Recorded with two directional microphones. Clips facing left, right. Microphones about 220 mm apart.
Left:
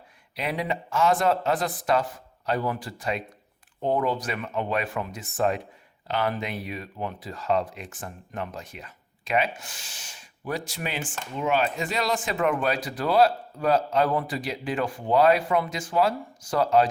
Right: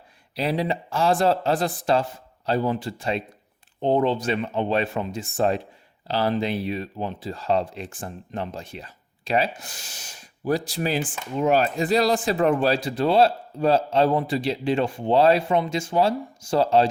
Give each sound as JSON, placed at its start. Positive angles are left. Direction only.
{"t": 0.3, "sound": "speech", "side_deg": -35}